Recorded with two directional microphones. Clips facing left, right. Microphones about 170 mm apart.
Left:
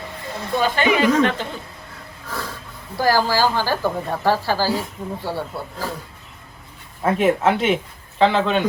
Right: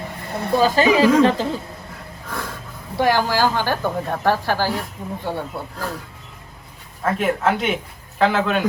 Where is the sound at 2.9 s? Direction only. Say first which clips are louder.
Even; centre (ahead or behind).